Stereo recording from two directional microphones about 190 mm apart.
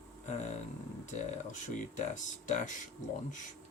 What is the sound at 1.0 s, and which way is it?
Speech, 40° left (ahead or behind).